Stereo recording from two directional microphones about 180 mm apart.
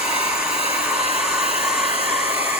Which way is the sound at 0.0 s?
5° right (ahead or behind).